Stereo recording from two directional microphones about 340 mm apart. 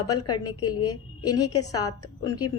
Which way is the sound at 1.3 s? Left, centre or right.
Left.